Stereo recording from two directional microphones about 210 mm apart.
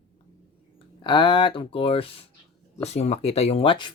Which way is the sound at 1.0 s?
25° left (ahead or behind).